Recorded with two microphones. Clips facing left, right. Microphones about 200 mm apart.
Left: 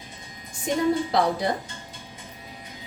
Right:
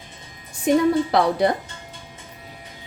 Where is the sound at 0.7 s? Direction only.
65° right (ahead or behind).